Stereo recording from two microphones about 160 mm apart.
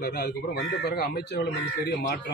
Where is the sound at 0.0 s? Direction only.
75° left (ahead or behind).